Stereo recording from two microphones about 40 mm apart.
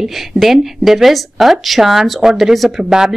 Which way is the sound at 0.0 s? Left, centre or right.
Centre.